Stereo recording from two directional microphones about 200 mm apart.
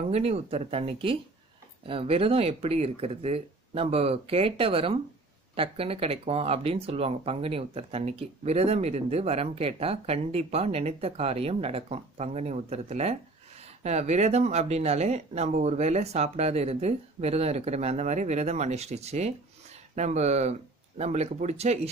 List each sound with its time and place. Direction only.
0.1 s speech: 30° right (ahead or behind)